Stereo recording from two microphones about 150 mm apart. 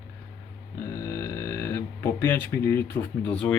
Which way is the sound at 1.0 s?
20° left (ahead or behind).